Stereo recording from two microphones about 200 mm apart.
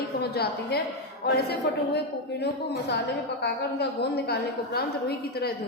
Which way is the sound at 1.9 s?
55° left (ahead or behind).